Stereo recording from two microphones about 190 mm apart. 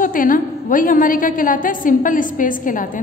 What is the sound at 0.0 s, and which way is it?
A woman's voice, 45° left (ahead or behind).